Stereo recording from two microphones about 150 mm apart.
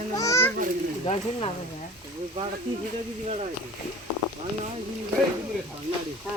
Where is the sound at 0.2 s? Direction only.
20° left (ahead or behind).